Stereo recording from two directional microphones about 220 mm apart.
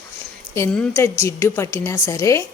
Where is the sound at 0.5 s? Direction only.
10° left (ahead or behind).